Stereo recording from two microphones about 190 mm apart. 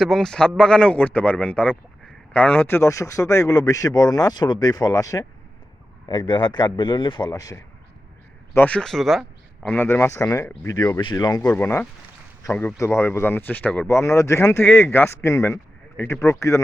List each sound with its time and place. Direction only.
0.0 s a man's voice: centre (ahead or behind); by 7.6 s 20° left (ahead or behind)
8.5 s speech: 5° left (ahead or behind)
9.6 s a man's voice: 10° left (ahead or behind)